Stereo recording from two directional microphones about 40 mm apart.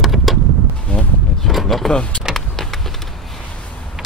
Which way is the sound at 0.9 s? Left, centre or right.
Left.